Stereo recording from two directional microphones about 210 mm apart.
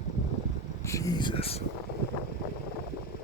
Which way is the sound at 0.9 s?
15° left (ahead or behind).